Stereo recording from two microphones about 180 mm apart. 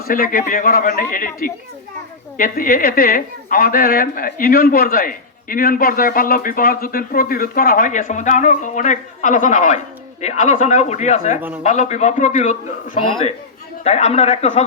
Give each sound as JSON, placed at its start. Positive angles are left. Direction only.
{"t": 0.1, "sound": "a man's voice", "side_deg": 50}